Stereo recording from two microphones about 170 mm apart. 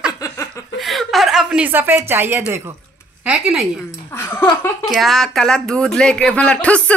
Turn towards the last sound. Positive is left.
turn(degrees=5)  # may be behind; listen again after turning